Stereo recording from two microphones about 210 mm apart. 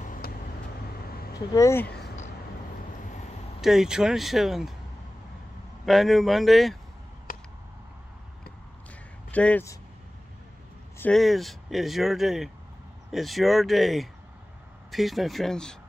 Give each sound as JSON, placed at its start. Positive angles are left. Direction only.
{"t": 0.0, "sound": "vehicle", "side_deg": 40}
{"t": 0.9, "sound": "a sound", "side_deg": 45}
{"t": 1.5, "sound": "speech", "side_deg": 15}
{"t": 3.6, "sound": "speech", "side_deg": 0}
{"t": 5.9, "sound": "speech", "side_deg": 0}
{"t": 7.3, "sound": "a sound", "side_deg": 40}
{"t": 9.3, "sound": "speech", "side_deg": 5}
{"t": 11.0, "sound": "speech", "side_deg": 5}